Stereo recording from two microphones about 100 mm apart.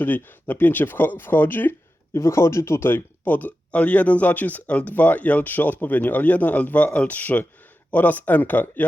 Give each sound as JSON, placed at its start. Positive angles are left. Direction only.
{"t": 0.0, "sound": "speech", "side_deg": 20}